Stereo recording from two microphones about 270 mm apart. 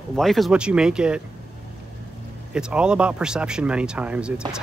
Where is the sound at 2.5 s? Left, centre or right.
Centre.